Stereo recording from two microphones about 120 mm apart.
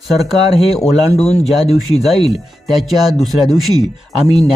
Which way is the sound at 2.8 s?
Centre (ahead or behind).